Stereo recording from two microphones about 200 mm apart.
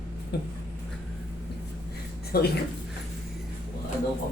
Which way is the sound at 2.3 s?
50° left (ahead or behind).